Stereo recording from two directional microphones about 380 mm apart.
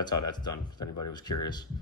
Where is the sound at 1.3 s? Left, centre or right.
Left.